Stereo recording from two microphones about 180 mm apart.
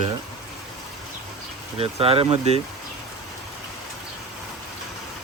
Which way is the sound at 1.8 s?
35° right (ahead or behind).